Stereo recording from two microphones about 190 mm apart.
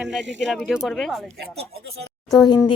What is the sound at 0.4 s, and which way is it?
Speech, 5° right (ahead or behind).